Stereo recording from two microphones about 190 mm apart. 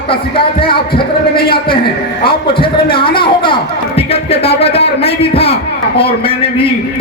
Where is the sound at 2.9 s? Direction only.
25° left (ahead or behind).